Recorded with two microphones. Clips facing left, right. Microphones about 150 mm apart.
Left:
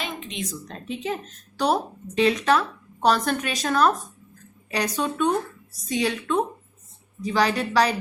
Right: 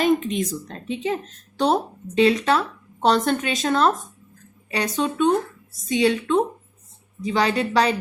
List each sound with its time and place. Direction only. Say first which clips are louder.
0.0 s speech: right 13 dB; 45° right (ahead or behind)
1.5 s a woman's voice: right 2 dB; 25° right (ahead or behind)